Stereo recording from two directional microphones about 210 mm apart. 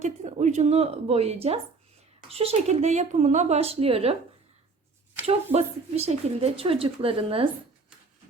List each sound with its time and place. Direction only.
0.0 s a woman's voice: 35° right (ahead or behind)
5.2 s a woman's voice: 30° right (ahead or behind)